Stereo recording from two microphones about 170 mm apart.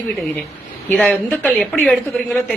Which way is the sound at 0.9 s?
5° left (ahead or behind).